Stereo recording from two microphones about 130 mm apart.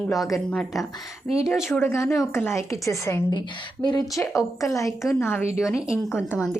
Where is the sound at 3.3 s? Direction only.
35° left (ahead or behind).